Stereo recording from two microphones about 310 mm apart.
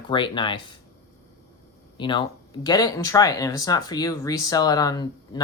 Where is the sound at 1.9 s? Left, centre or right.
Centre.